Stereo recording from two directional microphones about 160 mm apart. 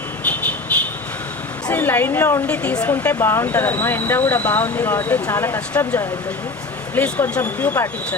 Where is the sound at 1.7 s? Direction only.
10° left (ahead or behind).